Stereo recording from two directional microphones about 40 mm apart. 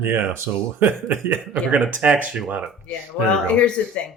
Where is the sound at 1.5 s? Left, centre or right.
Right.